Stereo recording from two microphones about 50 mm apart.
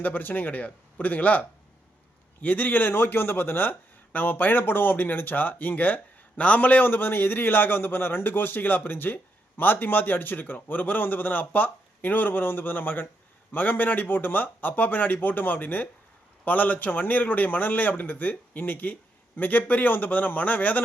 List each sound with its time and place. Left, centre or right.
0.0 s a man's voice: left